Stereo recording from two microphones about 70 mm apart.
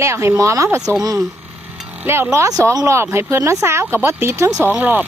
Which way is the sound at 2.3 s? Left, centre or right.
Right.